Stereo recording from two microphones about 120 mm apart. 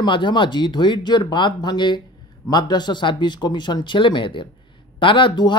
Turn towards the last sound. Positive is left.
turn(degrees=40)  # may be behind; listen again after turning